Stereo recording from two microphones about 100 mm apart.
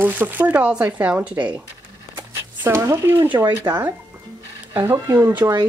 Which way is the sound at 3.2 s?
20° right (ahead or behind).